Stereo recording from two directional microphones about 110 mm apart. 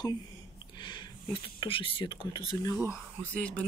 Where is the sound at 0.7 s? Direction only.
45° left (ahead or behind).